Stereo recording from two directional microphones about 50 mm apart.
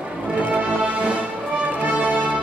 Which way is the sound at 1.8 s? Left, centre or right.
Right.